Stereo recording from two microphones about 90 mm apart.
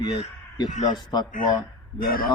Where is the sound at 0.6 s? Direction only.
50° left (ahead or behind).